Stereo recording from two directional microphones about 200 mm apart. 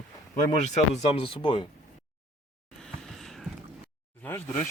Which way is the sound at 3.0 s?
Centre (ahead or behind).